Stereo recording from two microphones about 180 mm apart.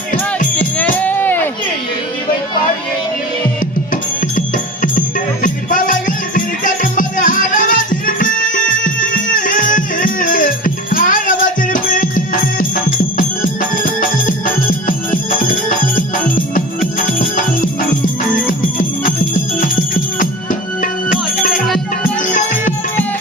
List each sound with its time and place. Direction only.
0.8 s music: 10° left (ahead or behind)
4.4 s music: 45° left (ahead or behind)
19.0 s music: 50° left (ahead or behind)